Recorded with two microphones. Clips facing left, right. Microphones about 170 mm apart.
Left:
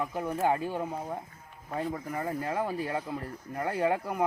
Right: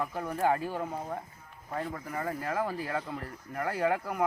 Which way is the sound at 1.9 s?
15° left (ahead or behind).